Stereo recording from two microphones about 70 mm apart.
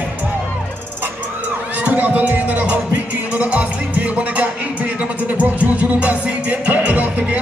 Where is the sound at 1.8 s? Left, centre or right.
Right.